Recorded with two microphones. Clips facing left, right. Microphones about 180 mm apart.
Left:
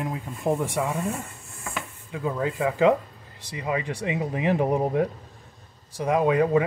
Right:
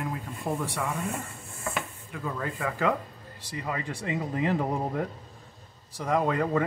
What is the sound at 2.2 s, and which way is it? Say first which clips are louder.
Speech: left 7 dB; 20° left (ahead or behind).